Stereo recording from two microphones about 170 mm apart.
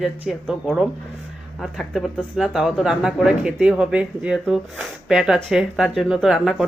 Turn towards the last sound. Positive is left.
turn(degrees=0)  # may be behind; listen again after turning